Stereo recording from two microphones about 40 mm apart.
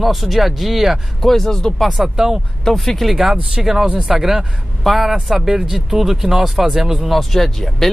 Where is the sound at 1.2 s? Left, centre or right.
Centre.